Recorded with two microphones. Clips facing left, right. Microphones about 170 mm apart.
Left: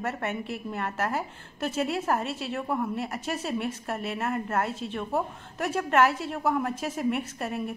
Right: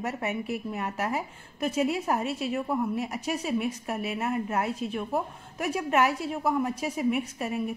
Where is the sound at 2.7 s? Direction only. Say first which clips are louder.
Right 1 dB; 15° right (ahead or behind).